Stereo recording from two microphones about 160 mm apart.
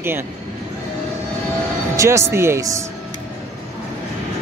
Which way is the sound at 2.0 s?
15° right (ahead or behind).